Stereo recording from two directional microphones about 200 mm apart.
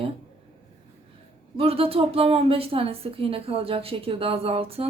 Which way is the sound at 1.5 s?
30° right (ahead or behind).